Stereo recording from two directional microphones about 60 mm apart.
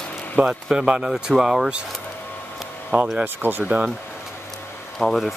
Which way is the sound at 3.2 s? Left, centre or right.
Right.